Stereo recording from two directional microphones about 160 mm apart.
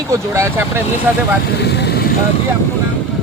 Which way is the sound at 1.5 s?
90° left.